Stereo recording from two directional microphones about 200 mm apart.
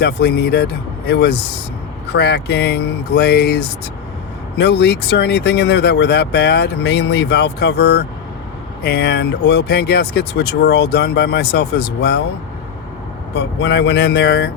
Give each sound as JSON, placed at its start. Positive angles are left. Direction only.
{"t": 0.0, "sound": "speech", "side_deg": 50}
{"t": 13.3, "sound": "speech", "side_deg": 60}